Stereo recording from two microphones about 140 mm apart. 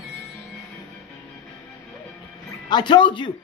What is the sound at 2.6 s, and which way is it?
Speech, 30° left (ahead or behind).